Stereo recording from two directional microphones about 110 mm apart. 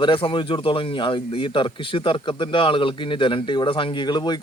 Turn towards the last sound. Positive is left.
turn(degrees=40)  # may be behind; listen again after turning